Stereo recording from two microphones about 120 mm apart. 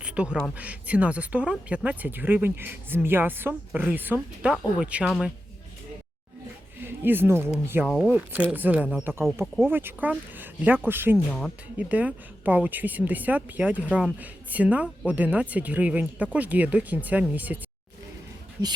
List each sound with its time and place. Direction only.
0.0 s a sound: 10° right (ahead or behind)
0.5 s speech: 10° right (ahead or behind)
6.7 s speech: 15° right (ahead or behind)